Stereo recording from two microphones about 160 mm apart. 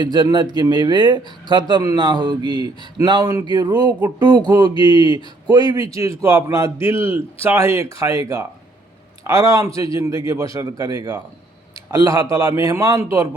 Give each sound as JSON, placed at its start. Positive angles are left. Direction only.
{"t": 0.0, "sound": "a man's voice", "side_deg": -25}